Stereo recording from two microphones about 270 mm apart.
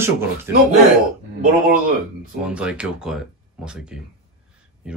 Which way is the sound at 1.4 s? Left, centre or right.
Right.